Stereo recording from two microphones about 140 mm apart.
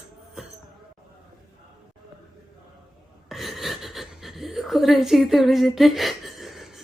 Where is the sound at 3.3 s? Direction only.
Centre (ahead or behind).